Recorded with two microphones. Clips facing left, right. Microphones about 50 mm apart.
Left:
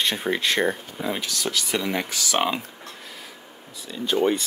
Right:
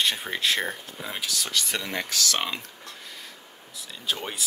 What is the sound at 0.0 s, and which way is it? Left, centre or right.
Speech, centre.